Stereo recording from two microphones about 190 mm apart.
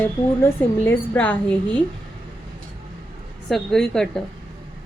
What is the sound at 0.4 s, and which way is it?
Speech, 10° left (ahead or behind).